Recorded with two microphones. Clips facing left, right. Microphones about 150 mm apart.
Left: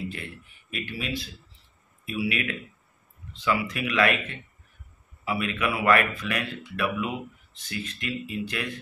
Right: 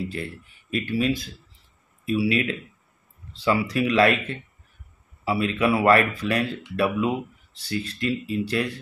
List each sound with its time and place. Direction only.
0.0 s speech: 35° right (ahead or behind)